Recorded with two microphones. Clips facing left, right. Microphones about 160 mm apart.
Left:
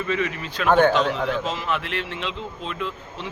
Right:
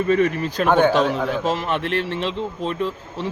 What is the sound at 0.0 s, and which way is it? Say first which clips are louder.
Speech: right 7 dB; 45° right (ahead or behind).